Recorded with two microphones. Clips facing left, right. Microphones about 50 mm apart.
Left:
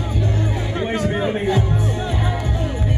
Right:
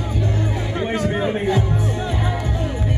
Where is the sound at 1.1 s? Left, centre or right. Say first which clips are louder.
Even; left.